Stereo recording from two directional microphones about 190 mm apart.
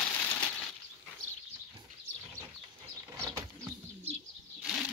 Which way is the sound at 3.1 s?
15° right (ahead or behind).